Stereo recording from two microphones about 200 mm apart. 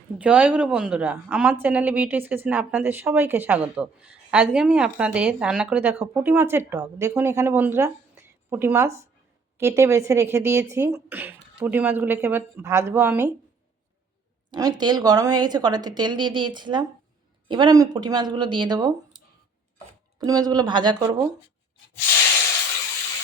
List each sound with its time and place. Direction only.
0.2 s a woman's voice: 5° right (ahead or behind)
14.5 s speech: 20° right (ahead or behind)
20.1 s speech: 20° right (ahead or behind)